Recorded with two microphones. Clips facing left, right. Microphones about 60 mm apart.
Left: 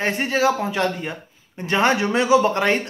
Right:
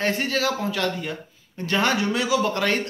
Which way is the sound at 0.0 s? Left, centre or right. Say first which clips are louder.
Left 4 dB; left.